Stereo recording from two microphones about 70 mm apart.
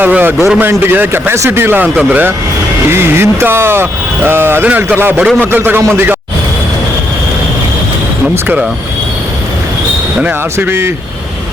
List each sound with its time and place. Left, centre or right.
0.0 s a man's voice: right
0.3 s a man's voice: centre
0.7 s speech: right
2.9 s speech: right
10.6 s speech: right